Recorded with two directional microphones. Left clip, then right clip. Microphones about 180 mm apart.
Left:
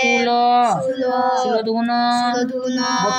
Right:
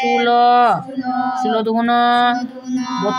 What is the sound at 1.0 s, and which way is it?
Child singing, 50° left (ahead or behind).